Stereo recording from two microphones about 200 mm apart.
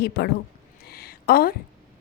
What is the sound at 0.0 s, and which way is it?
Speech, 55° left (ahead or behind).